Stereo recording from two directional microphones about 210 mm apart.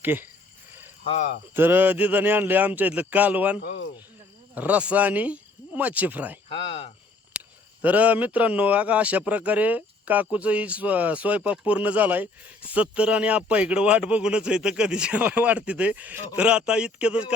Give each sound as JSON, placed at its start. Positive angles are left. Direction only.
{"t": 0.0, "sound": "speech", "side_deg": -10}
{"t": 1.0, "sound": "speech", "side_deg": 30}
{"t": 1.5, "sound": "a man's voice", "side_deg": -10}
{"t": 3.6, "sound": "speech", "side_deg": 50}
{"t": 4.5, "sound": "speech", "side_deg": -5}
{"t": 6.5, "sound": "speech", "side_deg": 25}
{"t": 7.8, "sound": "a man's voice", "side_deg": -5}